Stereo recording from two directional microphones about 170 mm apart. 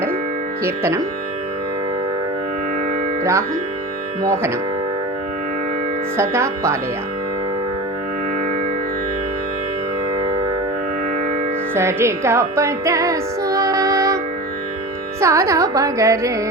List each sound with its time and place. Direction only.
0.6 s carnatic music: 15° right (ahead or behind)
4.2 s carnatic music: 15° right (ahead or behind)
6.1 s carnatic music: 15° right (ahead or behind)
11.7 s music: 15° right (ahead or behind)
15.2 s carnatic music: 15° right (ahead or behind)